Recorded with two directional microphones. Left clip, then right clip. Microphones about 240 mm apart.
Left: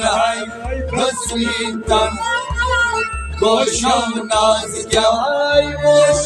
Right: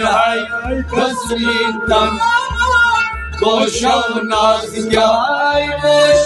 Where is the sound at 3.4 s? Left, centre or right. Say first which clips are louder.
Right 1 dB; left.